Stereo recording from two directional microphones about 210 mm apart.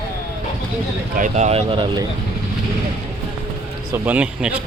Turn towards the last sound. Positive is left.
turn(degrees=-5)  # may be behind; listen again after turning